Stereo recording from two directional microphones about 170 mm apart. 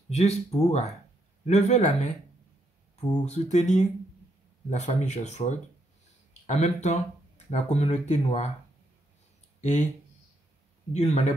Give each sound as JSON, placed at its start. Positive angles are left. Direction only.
{"t": 0.1, "sound": "speech", "side_deg": 40}
{"t": 3.3, "sound": "speech", "side_deg": 40}
{"t": 9.6, "sound": "speech", "side_deg": 45}
{"t": 10.9, "sound": "speech", "side_deg": 40}